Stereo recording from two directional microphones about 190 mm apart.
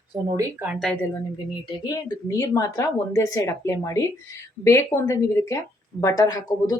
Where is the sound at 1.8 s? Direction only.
20° left (ahead or behind).